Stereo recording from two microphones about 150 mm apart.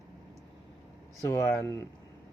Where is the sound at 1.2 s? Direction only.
20° left (ahead or behind).